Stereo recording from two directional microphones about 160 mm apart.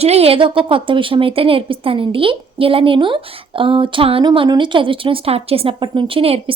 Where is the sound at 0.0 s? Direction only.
40° right (ahead or behind).